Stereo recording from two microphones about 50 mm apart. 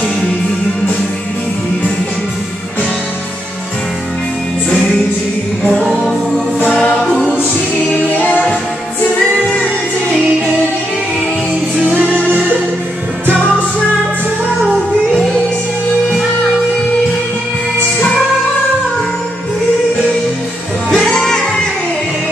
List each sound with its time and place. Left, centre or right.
6.6 s music: left
6.9 s music: centre
11.9 s music: right
20.9 s music: centre